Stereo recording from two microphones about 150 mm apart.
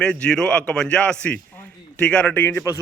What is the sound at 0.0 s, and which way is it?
A man's voice, 5° left (ahead or behind).